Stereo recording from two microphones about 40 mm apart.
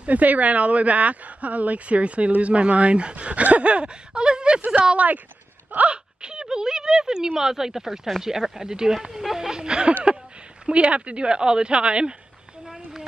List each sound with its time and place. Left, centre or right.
0.0 s speech: right
4.9 s speech: right
5.9 s speech: right
9.5 s speech: right